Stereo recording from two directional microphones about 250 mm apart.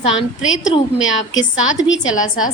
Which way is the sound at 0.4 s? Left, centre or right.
Left.